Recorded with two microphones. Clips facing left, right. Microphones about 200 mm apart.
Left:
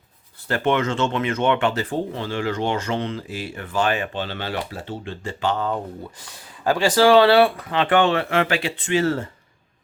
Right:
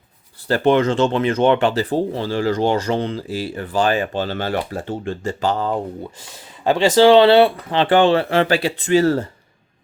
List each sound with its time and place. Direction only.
0.4 s speech: 35° right (ahead or behind)